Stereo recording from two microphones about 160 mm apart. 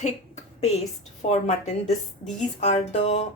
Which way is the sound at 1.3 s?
45° left (ahead or behind).